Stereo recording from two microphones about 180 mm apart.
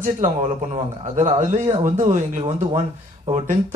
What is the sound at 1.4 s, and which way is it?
Speech, 40° right (ahead or behind).